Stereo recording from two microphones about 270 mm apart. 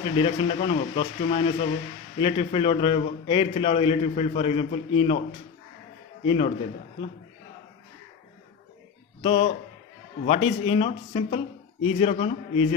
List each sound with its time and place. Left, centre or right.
0.2 s a man's voice: left
6.2 s a man's voice: left
9.2 s a man's voice: centre